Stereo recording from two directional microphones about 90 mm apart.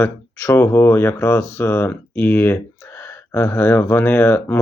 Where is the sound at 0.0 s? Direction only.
25° left (ahead or behind).